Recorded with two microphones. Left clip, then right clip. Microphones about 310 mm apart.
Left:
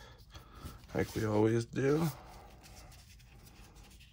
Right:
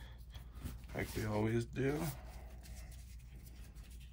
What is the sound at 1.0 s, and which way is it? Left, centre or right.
Speech, left.